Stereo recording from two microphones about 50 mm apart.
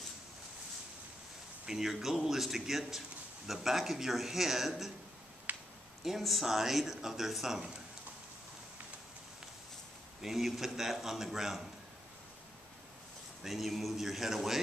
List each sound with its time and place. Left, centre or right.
1.7 s speech: centre
5.5 s a sound: right
6.0 s speech: centre
10.2 s speech: centre
13.4 s speech: centre